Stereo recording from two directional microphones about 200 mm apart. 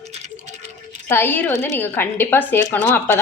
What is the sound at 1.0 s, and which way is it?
Speech, 10° left (ahead or behind).